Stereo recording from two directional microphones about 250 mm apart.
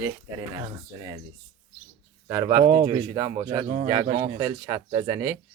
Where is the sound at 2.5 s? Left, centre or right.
Centre.